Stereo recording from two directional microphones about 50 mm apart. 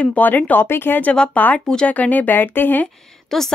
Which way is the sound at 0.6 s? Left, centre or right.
Left.